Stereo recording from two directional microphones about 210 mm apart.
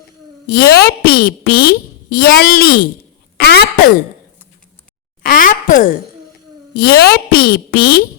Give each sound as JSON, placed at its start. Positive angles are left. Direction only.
{"t": 0.4, "sound": "a woman's voice", "side_deg": 45}
{"t": 3.3, "sound": "throat clearing", "side_deg": 50}
{"t": 5.2, "sound": "a sound", "side_deg": 40}
{"t": 6.7, "sound": "a woman's voice", "side_deg": 50}